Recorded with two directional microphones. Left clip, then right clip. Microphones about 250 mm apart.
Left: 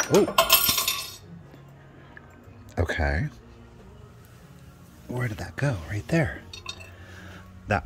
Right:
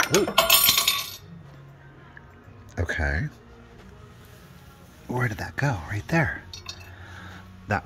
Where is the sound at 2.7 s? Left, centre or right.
Centre.